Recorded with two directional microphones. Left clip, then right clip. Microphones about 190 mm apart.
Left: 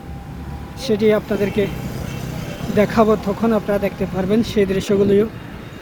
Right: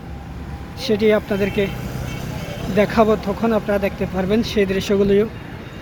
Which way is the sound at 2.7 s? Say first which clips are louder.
Left 1 dB; 20° left (ahead or behind).